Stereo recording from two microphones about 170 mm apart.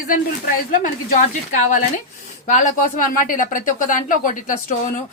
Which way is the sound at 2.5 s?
50° left (ahead or behind).